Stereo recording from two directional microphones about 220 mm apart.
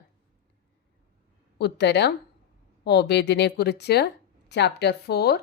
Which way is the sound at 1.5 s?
50° left (ahead or behind).